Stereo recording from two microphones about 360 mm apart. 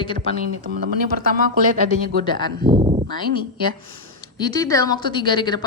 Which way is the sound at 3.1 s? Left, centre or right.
Centre.